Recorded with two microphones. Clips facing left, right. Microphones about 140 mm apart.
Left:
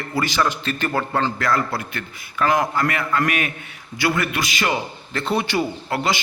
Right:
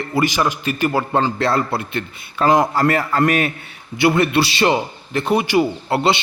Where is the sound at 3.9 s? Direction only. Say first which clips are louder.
Right 7 dB; 25° right (ahead or behind).